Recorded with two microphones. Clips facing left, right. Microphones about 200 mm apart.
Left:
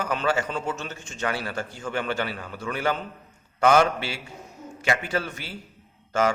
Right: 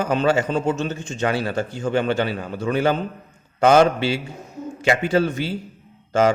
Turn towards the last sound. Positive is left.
turn(degrees=-20)  # may be behind; listen again after turning